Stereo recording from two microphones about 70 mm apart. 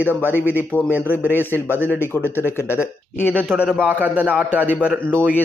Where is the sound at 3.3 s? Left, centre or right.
Right.